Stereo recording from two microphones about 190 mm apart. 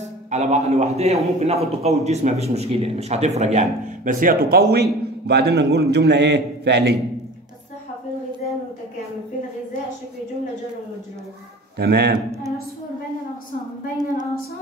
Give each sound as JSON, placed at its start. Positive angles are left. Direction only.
{"t": 0.3, "sound": "a man's voice", "side_deg": -35}
{"t": 11.8, "sound": "a man's voice", "side_deg": -60}